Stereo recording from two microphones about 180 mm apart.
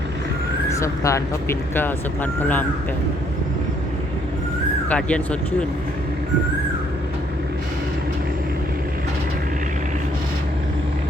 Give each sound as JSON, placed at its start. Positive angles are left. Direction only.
{"t": 0.7, "sound": "speech", "side_deg": 15}
{"t": 4.9, "sound": "speech", "side_deg": 5}